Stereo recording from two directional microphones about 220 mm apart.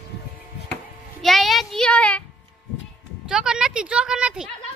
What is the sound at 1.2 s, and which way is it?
Child singing, centre (ahead or behind).